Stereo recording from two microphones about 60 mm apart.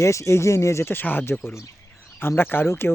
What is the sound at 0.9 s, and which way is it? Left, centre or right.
Speech, left.